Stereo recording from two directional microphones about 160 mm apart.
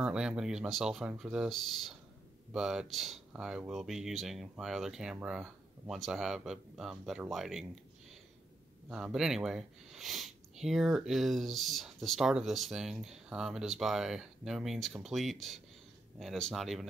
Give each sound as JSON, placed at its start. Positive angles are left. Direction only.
{"t": 0.0, "sound": "speech", "side_deg": -5}
{"t": 8.8, "sound": "speech", "side_deg": -5}